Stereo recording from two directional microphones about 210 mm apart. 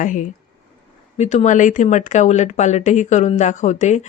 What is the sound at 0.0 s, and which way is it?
Speech, 35° left (ahead or behind).